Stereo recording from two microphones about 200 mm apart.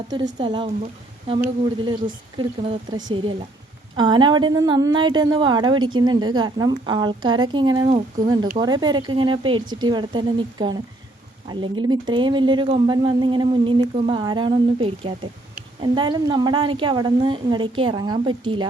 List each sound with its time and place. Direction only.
0.3 s a woman's voice: 25° right (ahead or behind)
2.4 s a woman's voice: 20° right (ahead or behind)